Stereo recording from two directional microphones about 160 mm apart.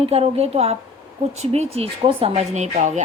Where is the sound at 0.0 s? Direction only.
35° right (ahead or behind).